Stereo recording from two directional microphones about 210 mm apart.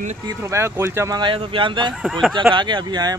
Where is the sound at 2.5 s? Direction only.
20° right (ahead or behind).